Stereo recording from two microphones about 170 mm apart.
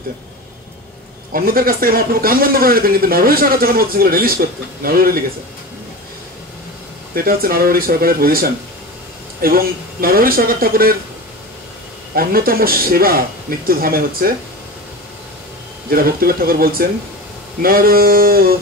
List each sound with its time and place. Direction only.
1.3 s speech: 60° right (ahead or behind)
7.2 s speech: 60° right (ahead or behind)
12.2 s speech: 60° right (ahead or behind)
15.9 s speech: 60° right (ahead or behind)